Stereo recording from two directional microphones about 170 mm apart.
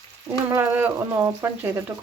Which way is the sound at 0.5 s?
15° right (ahead or behind).